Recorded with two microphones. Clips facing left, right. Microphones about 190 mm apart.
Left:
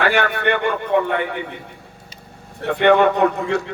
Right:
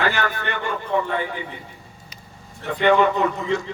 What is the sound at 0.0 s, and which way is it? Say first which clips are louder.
A man's voice: left 5 dB; 65° left (ahead or behind).